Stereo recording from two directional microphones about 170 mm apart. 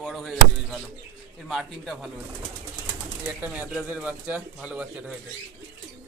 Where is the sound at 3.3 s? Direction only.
10° right (ahead or behind).